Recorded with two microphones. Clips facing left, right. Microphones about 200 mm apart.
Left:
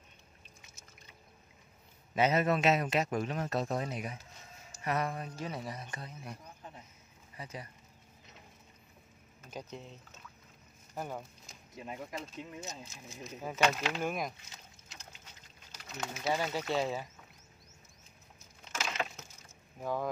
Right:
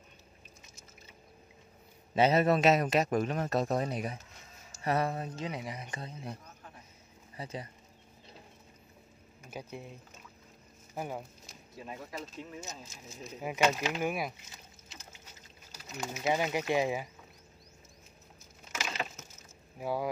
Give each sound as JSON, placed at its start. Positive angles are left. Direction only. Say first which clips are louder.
{"t": 2.1, "sound": "speech", "louder": "right 3 dB", "side_deg": -30}
{"t": 7.3, "sound": "speech", "louder": "right 4 dB", "side_deg": -25}
{"t": 9.4, "sound": "speech", "louder": "right 1 dB", "side_deg": -10}
{"t": 11.7, "sound": "speech", "louder": "left 1 dB", "side_deg": 15}
{"t": 13.3, "sound": "speech", "louder": "right 2 dB", "side_deg": -10}
{"t": 15.7, "sound": "speech", "louder": "right 2 dB", "side_deg": -10}
{"t": 18.6, "sound": "wood", "louder": "left 1 dB", "side_deg": -10}
{"t": 19.8, "sound": "speech", "louder": "right 2 dB", "side_deg": -10}